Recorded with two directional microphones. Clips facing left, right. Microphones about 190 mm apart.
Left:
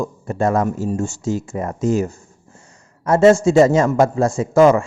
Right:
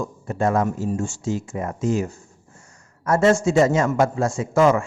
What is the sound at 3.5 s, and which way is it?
Speech, 35° left (ahead or behind).